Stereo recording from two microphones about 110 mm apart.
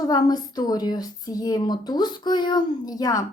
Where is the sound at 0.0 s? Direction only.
35° left (ahead or behind).